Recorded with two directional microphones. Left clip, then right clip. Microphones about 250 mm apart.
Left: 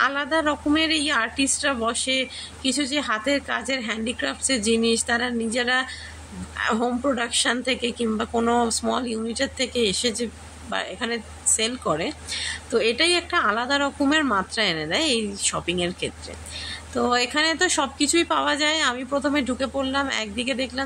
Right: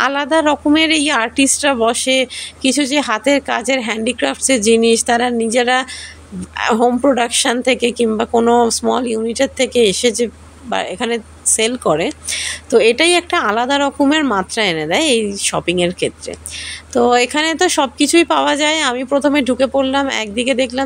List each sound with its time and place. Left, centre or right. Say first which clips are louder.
0.0 s speech: right 8 dB; right